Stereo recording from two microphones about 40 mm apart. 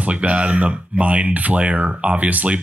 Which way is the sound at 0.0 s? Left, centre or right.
Right.